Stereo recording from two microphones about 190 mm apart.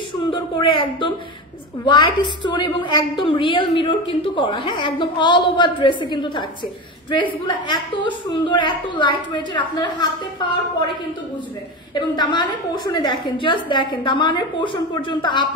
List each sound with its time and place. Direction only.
0.3 s a woman's voice: 25° left (ahead or behind)
11.9 s a woman's voice: 25° left (ahead or behind)